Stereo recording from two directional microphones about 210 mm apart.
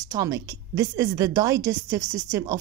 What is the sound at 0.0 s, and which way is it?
A woman's voice, 15° right (ahead or behind).